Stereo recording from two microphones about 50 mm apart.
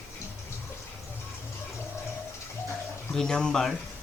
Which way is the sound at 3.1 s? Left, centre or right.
Centre.